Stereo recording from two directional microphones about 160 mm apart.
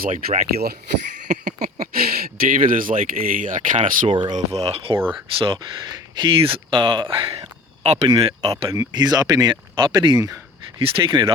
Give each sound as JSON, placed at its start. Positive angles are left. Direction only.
{"t": 0.0, "sound": "speech", "side_deg": -60}
{"t": 1.3, "sound": "speech", "side_deg": -50}
{"t": 4.1, "sound": "speech", "side_deg": -30}
{"t": 4.4, "sound": "speech", "side_deg": -40}
{"t": 8.7, "sound": "speech", "side_deg": -20}